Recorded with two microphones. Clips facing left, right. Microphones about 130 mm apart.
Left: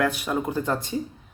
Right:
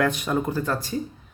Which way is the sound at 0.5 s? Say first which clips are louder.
Even; 20° left (ahead or behind).